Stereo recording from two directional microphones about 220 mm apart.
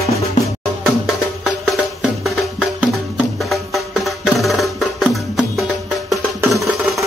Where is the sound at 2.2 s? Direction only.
Centre (ahead or behind).